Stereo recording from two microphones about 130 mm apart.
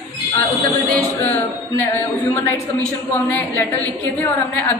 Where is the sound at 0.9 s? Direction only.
15° left (ahead or behind).